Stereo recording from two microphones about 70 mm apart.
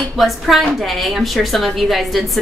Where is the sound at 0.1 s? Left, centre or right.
Centre.